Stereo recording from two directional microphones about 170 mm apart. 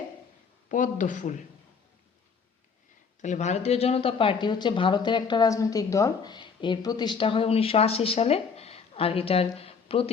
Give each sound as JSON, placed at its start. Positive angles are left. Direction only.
{"t": 0.7, "sound": "speech", "side_deg": 50}
{"t": 3.2, "sound": "speech", "side_deg": 45}